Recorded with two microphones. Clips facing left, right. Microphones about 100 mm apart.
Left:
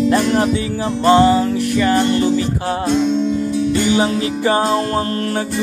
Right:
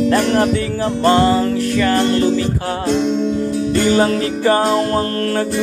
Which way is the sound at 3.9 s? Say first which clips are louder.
Right 2 dB; 15° left (ahead or behind).